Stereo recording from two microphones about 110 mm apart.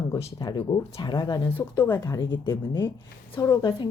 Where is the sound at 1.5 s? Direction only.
25° left (ahead or behind).